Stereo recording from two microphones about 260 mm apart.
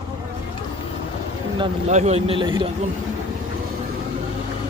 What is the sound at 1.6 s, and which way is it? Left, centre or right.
Speech, right.